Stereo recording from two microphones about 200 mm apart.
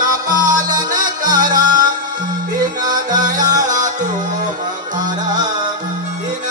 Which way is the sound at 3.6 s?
40° right (ahead or behind).